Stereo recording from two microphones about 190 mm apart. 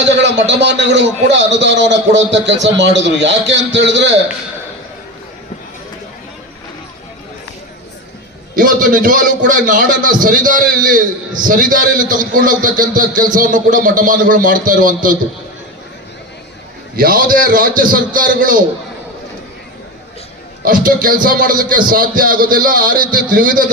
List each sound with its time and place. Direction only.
0.0 s a man's voice: 65° right (ahead or behind)
8.5 s a man's voice: 45° right (ahead or behind)
17.0 s a man's voice: 50° right (ahead or behind)
20.7 s a man's voice: 50° right (ahead or behind)